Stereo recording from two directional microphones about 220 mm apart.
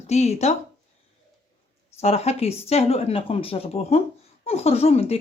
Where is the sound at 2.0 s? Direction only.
30° left (ahead or behind).